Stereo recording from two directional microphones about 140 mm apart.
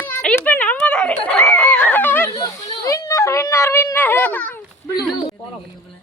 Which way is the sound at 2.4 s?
25° left (ahead or behind).